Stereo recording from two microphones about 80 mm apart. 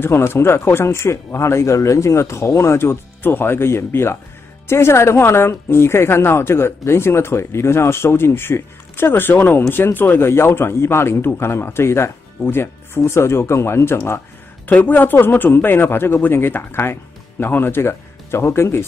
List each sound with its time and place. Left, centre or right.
0.0 s speech: left